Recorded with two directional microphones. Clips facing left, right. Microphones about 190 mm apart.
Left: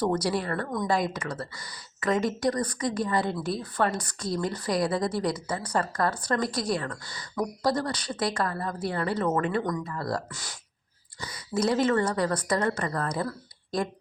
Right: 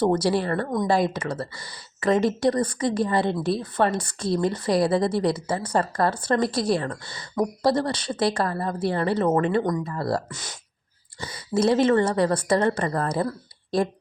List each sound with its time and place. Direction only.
0.0 s speech: 25° right (ahead or behind)